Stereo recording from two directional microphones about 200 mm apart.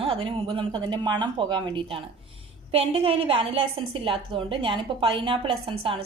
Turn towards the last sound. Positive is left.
turn(degrees=-25)  # may be behind; listen again after turning